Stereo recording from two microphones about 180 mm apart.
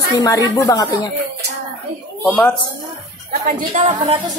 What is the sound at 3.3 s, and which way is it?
Speech, 45° right (ahead or behind).